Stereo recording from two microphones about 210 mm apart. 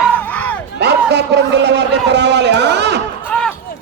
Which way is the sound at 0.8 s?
55° right (ahead or behind).